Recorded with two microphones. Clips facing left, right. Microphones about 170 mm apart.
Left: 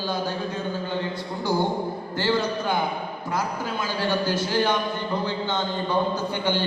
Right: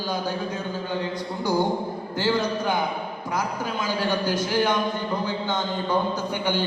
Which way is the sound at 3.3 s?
15° right (ahead or behind).